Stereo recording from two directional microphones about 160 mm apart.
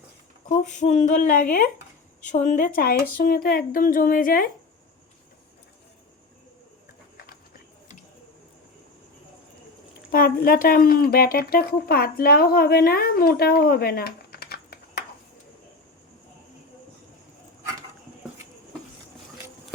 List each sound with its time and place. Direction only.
0.4 s speech: 50° left (ahead or behind)
10.1 s speech: 65° left (ahead or behind)